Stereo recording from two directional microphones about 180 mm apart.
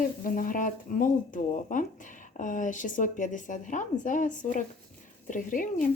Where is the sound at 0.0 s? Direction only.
50° left (ahead or behind).